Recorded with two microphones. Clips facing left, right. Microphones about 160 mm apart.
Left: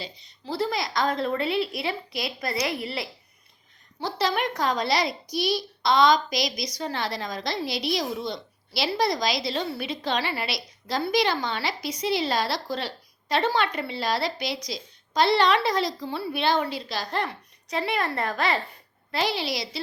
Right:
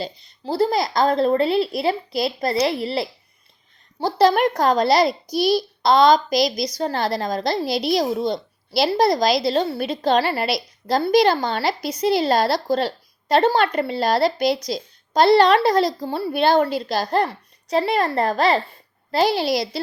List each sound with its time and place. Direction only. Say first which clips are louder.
0.0 s a woman's voice: right 9 dB; 35° right (ahead or behind)
4.3 s a woman's voice: right 8 dB; 45° right (ahead or behind)